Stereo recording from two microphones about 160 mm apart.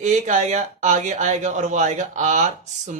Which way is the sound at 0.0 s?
50° right (ahead or behind).